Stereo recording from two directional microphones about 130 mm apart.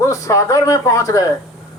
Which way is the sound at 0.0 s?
25° left (ahead or behind).